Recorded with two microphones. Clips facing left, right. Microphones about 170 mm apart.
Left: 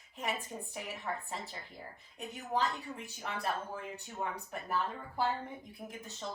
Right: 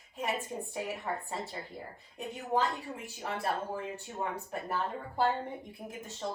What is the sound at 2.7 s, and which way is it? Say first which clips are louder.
Speech: right 2 dB; 35° right (ahead or behind).